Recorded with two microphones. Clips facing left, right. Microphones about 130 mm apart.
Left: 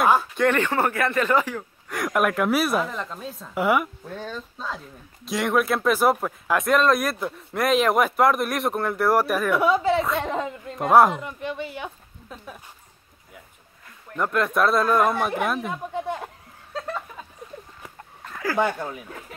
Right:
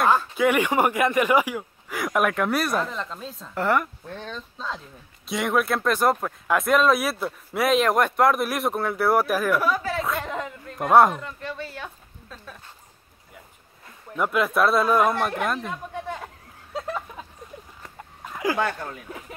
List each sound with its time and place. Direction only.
0.0 s a sound: 10° left (ahead or behind)
0.4 s speech: 10° right (ahead or behind)
9.6 s speech: 25° left (ahead or behind)
10.8 s speech: centre (ahead or behind)
11.1 s speech: 15° left (ahead or behind)
14.1 s speech: 5° right (ahead or behind)
15.7 s speech: 15° left (ahead or behind)
16.7 s a sound: 10° right (ahead or behind)
18.2 s a sound: 15° right (ahead or behind)
18.6 s speech: 10° left (ahead or behind)